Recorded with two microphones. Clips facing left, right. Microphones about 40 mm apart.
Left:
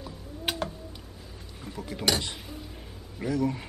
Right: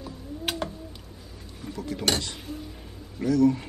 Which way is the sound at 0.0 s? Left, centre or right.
Centre.